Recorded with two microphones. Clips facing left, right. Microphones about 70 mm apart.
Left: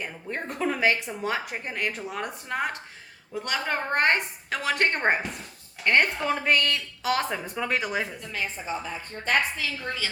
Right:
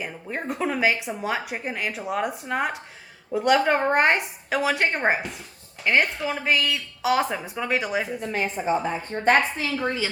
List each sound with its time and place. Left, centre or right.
0.0 s a woman's voice: centre
8.3 s a woman's voice: right